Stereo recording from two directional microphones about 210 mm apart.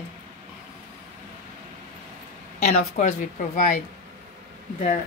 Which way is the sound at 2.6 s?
35° left (ahead or behind).